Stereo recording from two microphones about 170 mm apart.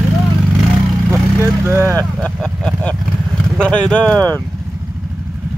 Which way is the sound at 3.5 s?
5° left (ahead or behind).